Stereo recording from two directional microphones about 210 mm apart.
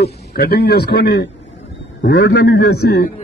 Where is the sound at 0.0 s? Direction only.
50° left (ahead or behind).